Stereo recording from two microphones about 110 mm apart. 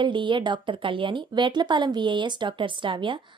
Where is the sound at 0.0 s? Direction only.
45° right (ahead or behind).